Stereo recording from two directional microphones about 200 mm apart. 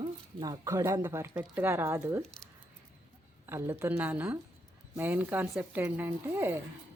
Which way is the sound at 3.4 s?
10° right (ahead or behind).